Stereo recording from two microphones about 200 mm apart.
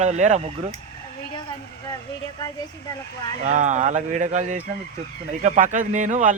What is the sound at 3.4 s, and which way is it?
Speech, 35° right (ahead or behind).